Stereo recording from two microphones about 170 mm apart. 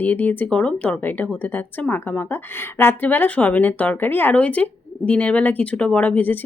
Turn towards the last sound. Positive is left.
turn(degrees=10)  # may be behind; listen again after turning